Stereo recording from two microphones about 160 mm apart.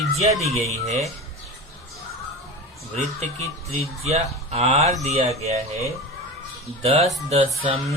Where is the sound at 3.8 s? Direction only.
40° right (ahead or behind).